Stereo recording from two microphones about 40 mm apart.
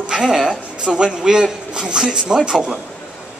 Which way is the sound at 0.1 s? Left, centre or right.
Centre.